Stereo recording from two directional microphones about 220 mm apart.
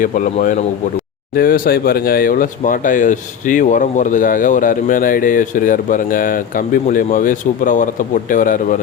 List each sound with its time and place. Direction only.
0.0 s speech: 35° left (ahead or behind)